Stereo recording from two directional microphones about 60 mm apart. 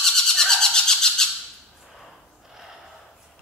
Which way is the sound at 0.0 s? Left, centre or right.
Centre.